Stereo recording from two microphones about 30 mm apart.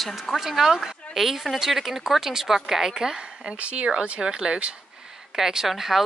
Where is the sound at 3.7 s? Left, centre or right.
Right.